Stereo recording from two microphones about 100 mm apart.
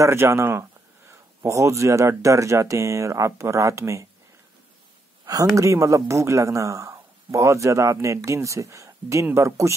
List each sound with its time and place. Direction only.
0.0 s speech: 25° right (ahead or behind)
5.2 s speech: 35° right (ahead or behind)